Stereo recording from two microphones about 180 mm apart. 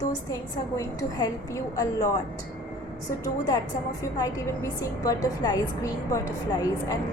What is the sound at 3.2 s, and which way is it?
A woman's voice, 20° left (ahead or behind).